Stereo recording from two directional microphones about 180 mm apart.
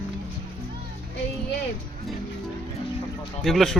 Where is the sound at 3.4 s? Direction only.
Centre (ahead or behind).